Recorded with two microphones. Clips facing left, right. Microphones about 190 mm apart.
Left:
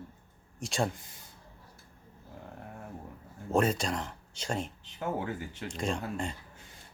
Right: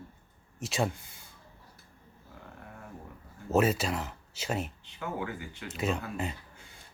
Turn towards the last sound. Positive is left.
turn(degrees=-5)  # may be behind; listen again after turning